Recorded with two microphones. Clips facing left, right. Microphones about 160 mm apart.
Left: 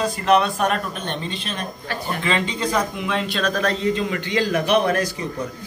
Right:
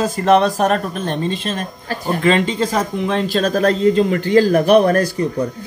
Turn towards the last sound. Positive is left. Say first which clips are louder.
# right 7 dB
turn(degrees=-40)  # may be behind; listen again after turning